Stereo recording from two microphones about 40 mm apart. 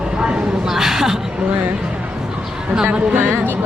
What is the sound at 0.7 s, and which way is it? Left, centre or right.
Speech, centre.